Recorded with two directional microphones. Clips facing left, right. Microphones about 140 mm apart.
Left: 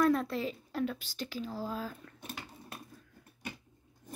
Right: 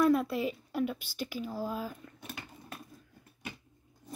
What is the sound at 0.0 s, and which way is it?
A woman's voice, 10° right (ahead or behind).